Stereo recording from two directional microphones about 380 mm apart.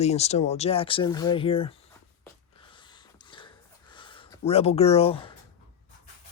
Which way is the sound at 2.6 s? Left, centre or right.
Centre.